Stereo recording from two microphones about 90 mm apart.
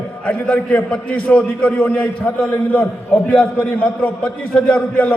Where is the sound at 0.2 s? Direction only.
15° left (ahead or behind).